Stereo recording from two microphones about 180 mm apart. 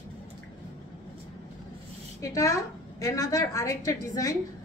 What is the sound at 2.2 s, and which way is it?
A woman's voice, 15° left (ahead or behind).